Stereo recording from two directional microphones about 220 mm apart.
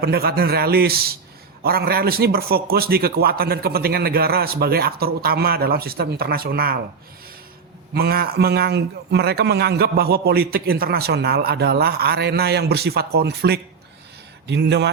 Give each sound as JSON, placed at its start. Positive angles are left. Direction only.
{"t": 0.0, "sound": "a man's voice", "side_deg": -45}
{"t": 7.9, "sound": "a man's voice", "side_deg": -45}